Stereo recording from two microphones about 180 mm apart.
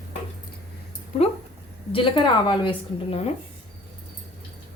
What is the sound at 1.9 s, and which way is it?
A woman's voice, 30° left (ahead or behind).